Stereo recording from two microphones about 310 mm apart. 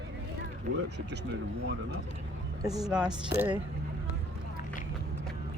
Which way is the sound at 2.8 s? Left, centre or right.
Centre.